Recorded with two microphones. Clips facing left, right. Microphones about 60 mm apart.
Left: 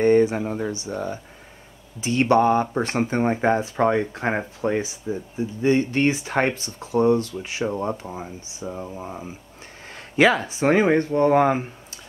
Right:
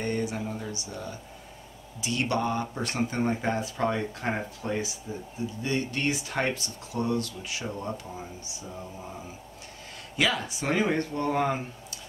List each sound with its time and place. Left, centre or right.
0.0 s speech: left